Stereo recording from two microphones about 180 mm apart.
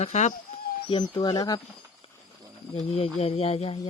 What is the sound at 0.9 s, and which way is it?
Speech, 25° left (ahead or behind).